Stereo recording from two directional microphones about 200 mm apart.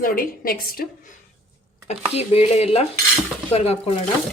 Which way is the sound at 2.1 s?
30° left (ahead or behind).